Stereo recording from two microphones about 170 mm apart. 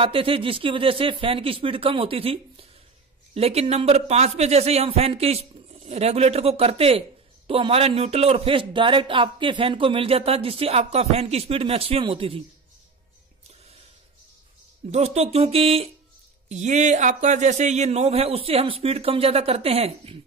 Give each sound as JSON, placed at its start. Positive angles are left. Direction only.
{"t": 0.0, "sound": "a man's voice", "side_deg": -30}
{"t": 14.9, "sound": "a man's voice", "side_deg": -40}